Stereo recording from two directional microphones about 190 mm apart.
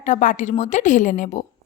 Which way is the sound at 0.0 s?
40° left (ahead or behind).